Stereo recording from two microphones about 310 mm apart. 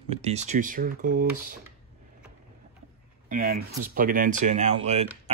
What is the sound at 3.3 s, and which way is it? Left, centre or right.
Speech, right.